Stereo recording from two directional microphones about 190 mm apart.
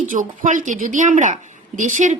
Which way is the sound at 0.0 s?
40° right (ahead or behind).